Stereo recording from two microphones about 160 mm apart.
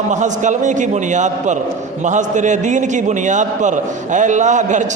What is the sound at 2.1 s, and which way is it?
A man's voice, 50° right (ahead or behind).